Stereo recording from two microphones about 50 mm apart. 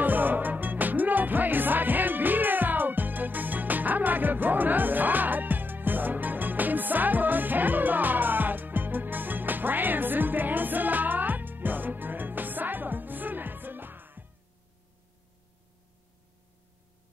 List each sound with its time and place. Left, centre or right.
0.0 s music: right